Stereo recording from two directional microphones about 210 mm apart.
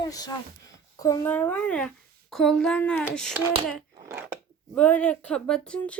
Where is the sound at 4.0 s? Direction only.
15° right (ahead or behind).